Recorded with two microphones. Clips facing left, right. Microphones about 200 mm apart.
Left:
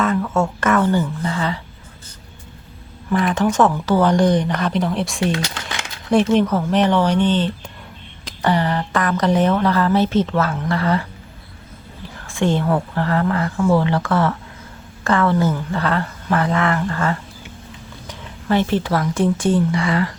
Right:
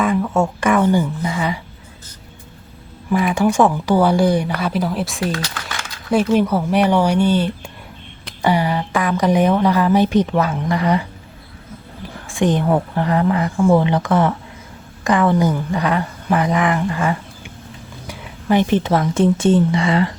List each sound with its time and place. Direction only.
0.0 s a woman's voice: 15° right (ahead or behind)
3.1 s a woman's voice: 10° right (ahead or behind)
5.2 s a sound: 25° left (ahead or behind)
6.3 s a woman's voice: 10° right (ahead or behind)
12.2 s a woman's voice: 15° right (ahead or behind)